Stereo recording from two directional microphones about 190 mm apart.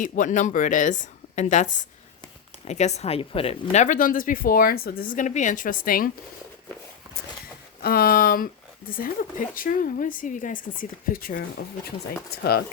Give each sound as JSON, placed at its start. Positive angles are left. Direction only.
{"t": 0.0, "sound": "a woman's voice", "side_deg": 40}
{"t": 7.8, "sound": "speech", "side_deg": 50}